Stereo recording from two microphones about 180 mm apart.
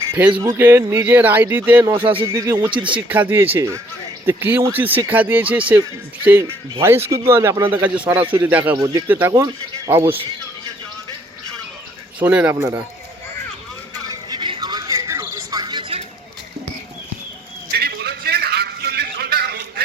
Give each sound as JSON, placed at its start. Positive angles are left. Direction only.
{"t": 0.1, "sound": "speech", "side_deg": -10}
{"t": 2.6, "sound": "speech", "side_deg": -25}
{"t": 3.1, "sound": "speech", "side_deg": -10}
{"t": 6.8, "sound": "speech", "side_deg": -15}
{"t": 12.2, "sound": "speech", "side_deg": -5}
{"t": 14.1, "sound": "a sound", "side_deg": -25}
{"t": 17.7, "sound": "music", "side_deg": -60}